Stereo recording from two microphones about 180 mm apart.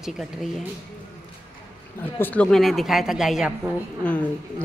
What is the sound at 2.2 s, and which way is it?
A woman's voice, 10° left (ahead or behind).